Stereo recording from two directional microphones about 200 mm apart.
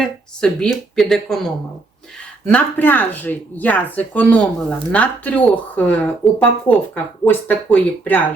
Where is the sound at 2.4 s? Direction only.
10° left (ahead or behind).